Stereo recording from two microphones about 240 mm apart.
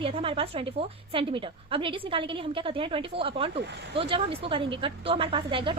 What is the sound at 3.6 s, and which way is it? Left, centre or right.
Speech, right.